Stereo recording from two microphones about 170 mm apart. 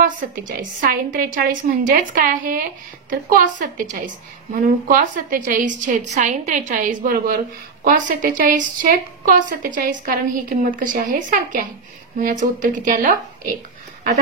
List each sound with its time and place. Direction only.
0.0 s a woman's voice: 50° right (ahead or behind)